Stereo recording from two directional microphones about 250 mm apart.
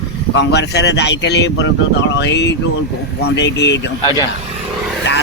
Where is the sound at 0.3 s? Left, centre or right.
Left.